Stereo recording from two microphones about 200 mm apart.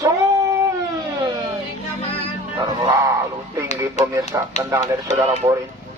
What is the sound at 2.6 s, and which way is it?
Music, 20° right (ahead or behind).